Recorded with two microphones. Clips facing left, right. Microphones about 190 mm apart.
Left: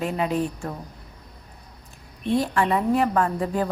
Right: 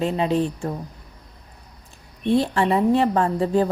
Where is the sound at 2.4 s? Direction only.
25° right (ahead or behind).